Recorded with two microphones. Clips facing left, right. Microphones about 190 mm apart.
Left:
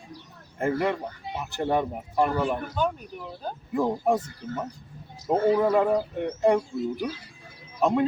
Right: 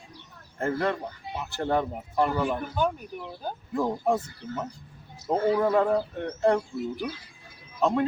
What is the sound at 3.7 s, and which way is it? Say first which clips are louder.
A man's voice: left 2 dB; 10° left (ahead or behind).